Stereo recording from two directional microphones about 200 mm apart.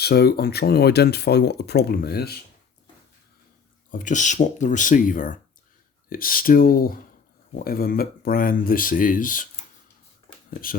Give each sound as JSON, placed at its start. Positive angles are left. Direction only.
{"t": 0.0, "sound": "speech", "side_deg": 50}
{"t": 3.9, "sound": "speech", "side_deg": 40}